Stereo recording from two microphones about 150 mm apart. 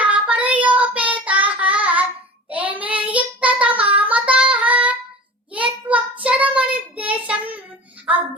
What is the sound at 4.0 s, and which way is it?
Female singing, 10° right (ahead or behind).